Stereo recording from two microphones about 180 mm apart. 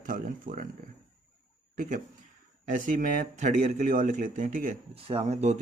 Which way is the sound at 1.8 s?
50° right (ahead or behind).